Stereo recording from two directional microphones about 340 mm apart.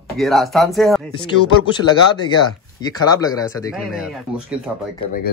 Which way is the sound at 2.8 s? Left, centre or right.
Centre.